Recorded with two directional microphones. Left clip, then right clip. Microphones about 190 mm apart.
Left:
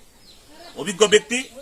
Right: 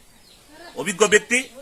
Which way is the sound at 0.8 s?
10° left (ahead or behind).